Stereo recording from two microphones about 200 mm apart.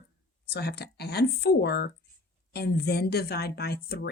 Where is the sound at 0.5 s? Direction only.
55° left (ahead or behind).